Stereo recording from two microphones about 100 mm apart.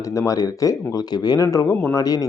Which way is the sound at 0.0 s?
35° left (ahead or behind).